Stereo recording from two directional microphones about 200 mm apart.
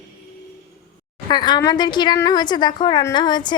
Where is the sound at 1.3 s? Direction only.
20° left (ahead or behind).